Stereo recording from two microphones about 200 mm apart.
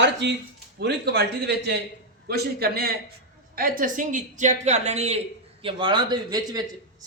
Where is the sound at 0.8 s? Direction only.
55° right (ahead or behind).